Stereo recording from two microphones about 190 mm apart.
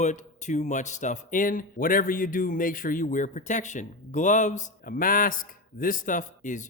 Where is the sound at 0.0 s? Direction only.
40° left (ahead or behind).